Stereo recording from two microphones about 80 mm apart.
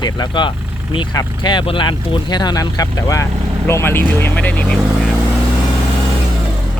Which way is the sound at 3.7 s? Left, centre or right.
Left.